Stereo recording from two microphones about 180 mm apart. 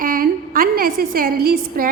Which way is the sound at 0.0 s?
50° right (ahead or behind).